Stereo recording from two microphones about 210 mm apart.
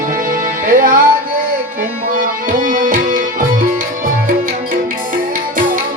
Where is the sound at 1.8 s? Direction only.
40° right (ahead or behind).